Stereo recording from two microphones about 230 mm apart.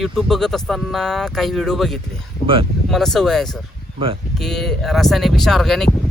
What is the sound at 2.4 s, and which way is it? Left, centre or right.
Speech, right.